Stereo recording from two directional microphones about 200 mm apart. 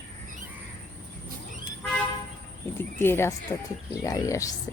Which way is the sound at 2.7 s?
10° left (ahead or behind).